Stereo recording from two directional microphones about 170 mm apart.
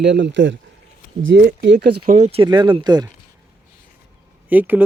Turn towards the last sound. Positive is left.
turn(degrees=-10)  # may be behind; listen again after turning